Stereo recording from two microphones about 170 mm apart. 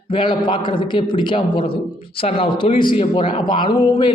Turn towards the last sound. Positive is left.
turn(degrees=30)  # may be behind; listen again after turning